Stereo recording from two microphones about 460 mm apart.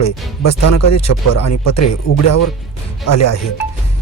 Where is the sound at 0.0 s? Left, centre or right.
Left.